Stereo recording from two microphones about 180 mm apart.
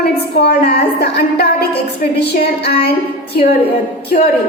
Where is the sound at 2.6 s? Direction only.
65° left (ahead or behind).